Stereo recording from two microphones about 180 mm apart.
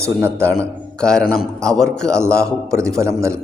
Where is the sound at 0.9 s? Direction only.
5° left (ahead or behind).